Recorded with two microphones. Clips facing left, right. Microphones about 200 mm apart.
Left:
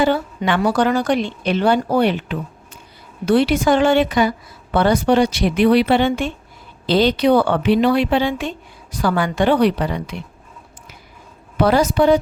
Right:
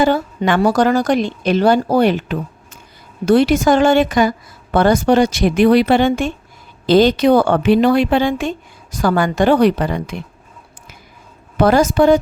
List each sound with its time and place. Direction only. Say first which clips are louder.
0.0 s a woman's voice: right 2 dB; 45° right (ahead or behind)
11.5 s a woman's voice: right 3 dB; 45° right (ahead or behind)